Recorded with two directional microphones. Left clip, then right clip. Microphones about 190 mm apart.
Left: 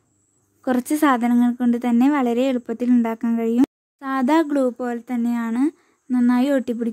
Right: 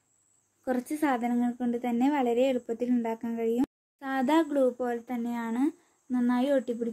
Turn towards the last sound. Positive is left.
turn(degrees=30)  # may be behind; listen again after turning